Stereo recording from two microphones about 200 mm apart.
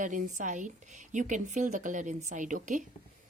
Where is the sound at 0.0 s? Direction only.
40° right (ahead or behind).